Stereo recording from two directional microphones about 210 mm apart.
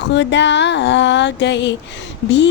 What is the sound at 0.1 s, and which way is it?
Music, 55° left (ahead or behind).